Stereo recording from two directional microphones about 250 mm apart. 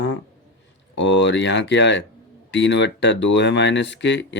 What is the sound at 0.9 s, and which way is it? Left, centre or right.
Speech, left.